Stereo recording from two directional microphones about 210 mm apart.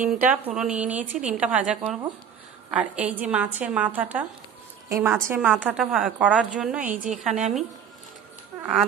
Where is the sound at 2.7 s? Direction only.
5° right (ahead or behind).